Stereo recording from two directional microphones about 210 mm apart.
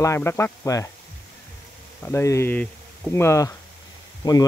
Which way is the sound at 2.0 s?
15° left (ahead or behind).